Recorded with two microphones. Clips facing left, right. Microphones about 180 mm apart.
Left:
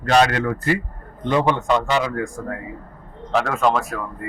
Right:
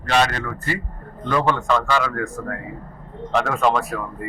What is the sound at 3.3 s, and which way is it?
Speech, centre (ahead or behind).